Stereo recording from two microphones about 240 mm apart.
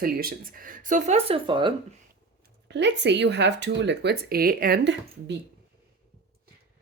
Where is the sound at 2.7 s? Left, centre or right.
Right.